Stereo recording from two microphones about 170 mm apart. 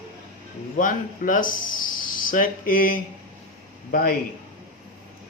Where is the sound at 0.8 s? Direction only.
50° left (ahead or behind).